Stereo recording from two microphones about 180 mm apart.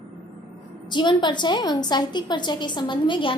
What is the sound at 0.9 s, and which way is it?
A woman's voice, 25° left (ahead or behind).